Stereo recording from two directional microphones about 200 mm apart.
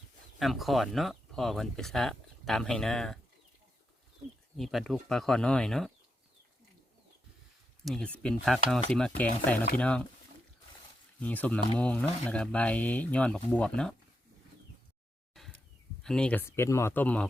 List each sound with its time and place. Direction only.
0.3 s speech: centre (ahead or behind)
4.5 s speech: centre (ahead or behind)
7.9 s speech: 5° left (ahead or behind)
11.2 s speech: 5° left (ahead or behind)
15.4 s a sound: centre (ahead or behind)
16.0 s speech: 5° left (ahead or behind)